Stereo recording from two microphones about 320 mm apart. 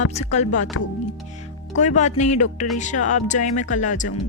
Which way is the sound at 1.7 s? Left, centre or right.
Left.